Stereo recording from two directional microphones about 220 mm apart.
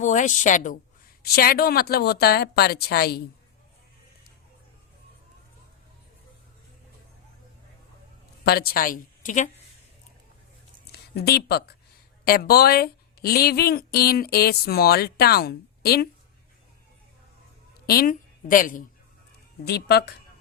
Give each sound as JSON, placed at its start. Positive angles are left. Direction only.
{"t": 0.0, "sound": "a woman's voice", "side_deg": 35}
{"t": 8.4, "sound": "a woman's voice", "side_deg": 45}
{"t": 10.9, "sound": "a woman's voice", "side_deg": 45}
{"t": 17.8, "sound": "a woman's voice", "side_deg": 40}
{"t": 19.6, "sound": "a woman's voice", "side_deg": 50}